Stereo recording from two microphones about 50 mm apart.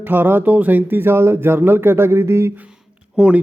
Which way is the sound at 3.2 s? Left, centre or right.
Right.